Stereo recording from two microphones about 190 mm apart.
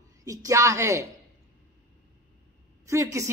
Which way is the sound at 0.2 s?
15° right (ahead or behind).